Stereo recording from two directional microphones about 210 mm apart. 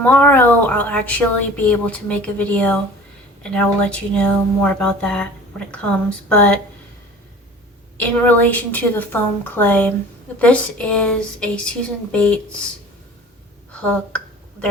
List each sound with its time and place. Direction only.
0.0 s a woman's voice: 10° left (ahead or behind)
7.9 s a woman's voice: 5° left (ahead or behind)